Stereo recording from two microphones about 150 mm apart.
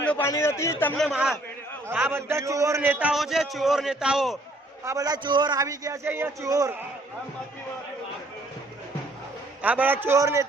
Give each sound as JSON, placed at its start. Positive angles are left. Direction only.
{"t": 0.1, "sound": "a man's voice", "side_deg": 15}
{"t": 0.9, "sound": "a man's voice", "side_deg": 0}
{"t": 1.9, "sound": "a man's voice", "side_deg": -15}
{"t": 4.9, "sound": "a man's voice", "side_deg": -25}
{"t": 9.6, "sound": "a man's voice", "side_deg": -10}